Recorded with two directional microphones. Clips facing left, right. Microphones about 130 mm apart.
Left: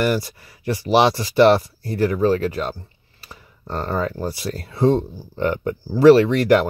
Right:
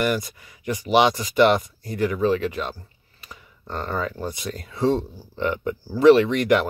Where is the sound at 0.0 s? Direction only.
35° left (ahead or behind).